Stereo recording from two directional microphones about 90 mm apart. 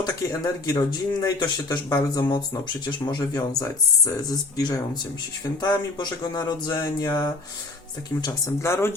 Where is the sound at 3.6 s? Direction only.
40° left (ahead or behind).